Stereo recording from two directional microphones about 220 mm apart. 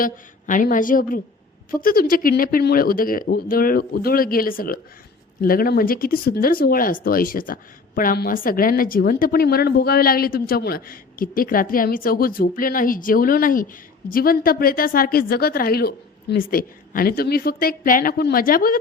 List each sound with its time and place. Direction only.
0.0 s speech: 35° left (ahead or behind)